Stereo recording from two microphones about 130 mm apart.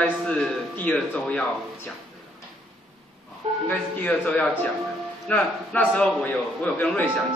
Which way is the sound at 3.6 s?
10° left (ahead or behind).